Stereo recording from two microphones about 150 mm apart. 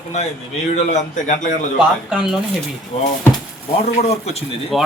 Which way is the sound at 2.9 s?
45° left (ahead or behind).